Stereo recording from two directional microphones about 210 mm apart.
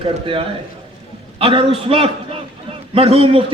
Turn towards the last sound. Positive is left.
turn(degrees=-25)  # may be behind; listen again after turning